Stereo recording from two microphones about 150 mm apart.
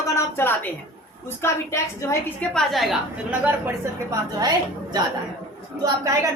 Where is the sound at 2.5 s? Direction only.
Centre (ahead or behind).